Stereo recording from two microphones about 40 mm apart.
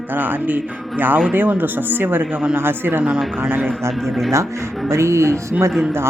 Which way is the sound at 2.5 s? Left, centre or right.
Right.